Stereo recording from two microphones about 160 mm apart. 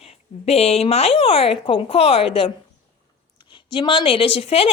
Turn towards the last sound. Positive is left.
turn(degrees=40)  # may be behind; listen again after turning